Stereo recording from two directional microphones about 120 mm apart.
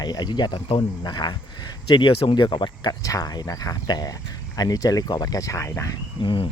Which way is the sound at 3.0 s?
30° left (ahead or behind).